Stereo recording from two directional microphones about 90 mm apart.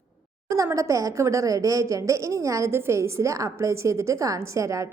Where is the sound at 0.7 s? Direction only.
35° right (ahead or behind).